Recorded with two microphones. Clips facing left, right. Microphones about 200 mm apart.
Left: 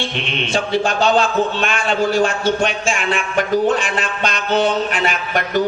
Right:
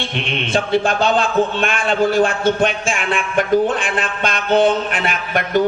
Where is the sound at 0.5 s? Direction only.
55° right (ahead or behind).